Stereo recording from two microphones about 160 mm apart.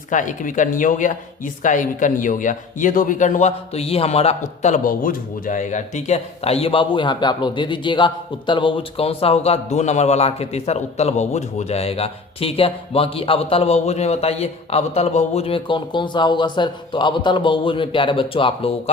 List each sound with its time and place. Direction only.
0.1 s a man's voice: 55° left (ahead or behind); by 18.7 s 35° left (ahead or behind)